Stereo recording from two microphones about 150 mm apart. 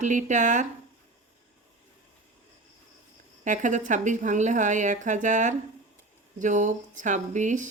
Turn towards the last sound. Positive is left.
turn(degrees=-55)  # may be behind; listen again after turning